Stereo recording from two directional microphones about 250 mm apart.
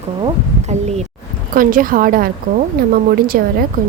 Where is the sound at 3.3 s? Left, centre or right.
Right.